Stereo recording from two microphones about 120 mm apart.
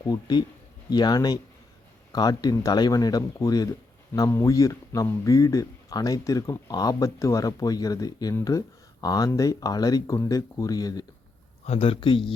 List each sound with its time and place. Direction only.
0.0 s speech: 35° left (ahead or behind)
11.6 s speech: 60° left (ahead or behind)